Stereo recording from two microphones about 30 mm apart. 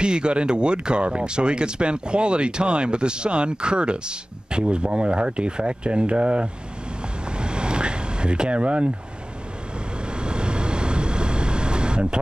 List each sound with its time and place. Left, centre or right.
0.0 s speech: right
7.2 s vehicle: right
10.0 s vehicle: right